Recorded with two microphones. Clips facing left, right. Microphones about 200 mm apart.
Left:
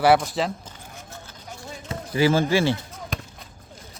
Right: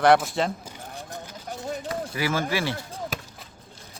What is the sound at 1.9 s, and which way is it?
Speech, 25° left (ahead or behind).